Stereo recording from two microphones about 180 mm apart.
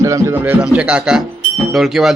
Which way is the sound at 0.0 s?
15° right (ahead or behind).